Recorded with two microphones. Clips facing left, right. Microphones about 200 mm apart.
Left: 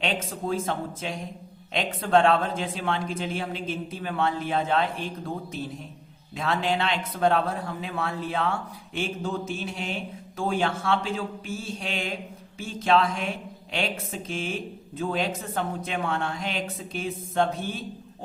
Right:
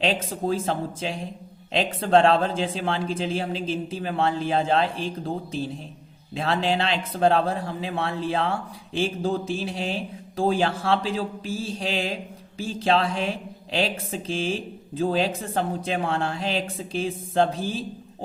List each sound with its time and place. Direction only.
0.0 s speech: 30° right (ahead or behind)